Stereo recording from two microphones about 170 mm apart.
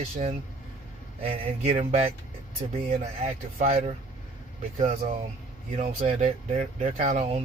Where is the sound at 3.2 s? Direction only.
40° right (ahead or behind).